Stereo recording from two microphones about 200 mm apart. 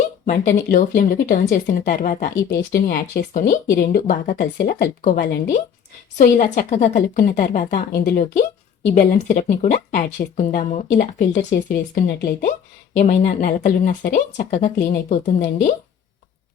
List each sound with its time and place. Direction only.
0.3 s speech: 40° left (ahead or behind)
6.1 s speech: 35° left (ahead or behind); by 12.5 s 50° left (ahead or behind)
12.9 s speech: 35° left (ahead or behind)